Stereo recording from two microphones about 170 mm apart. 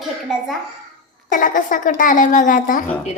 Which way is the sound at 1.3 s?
50° left (ahead or behind).